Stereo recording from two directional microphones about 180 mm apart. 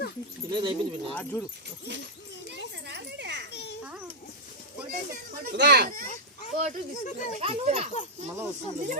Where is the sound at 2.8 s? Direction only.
70° right (ahead or behind).